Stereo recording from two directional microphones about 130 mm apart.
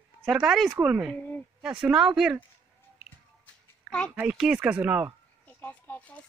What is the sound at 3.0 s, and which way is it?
Music, 50° left (ahead or behind).